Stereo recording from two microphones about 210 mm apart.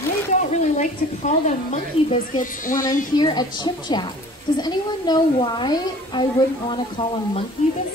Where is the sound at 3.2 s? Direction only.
20° left (ahead or behind).